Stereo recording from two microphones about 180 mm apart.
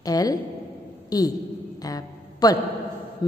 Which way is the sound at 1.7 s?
20° left (ahead or behind).